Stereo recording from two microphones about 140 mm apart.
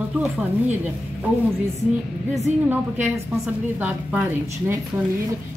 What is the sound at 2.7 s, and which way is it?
Speech, 15° right (ahead or behind).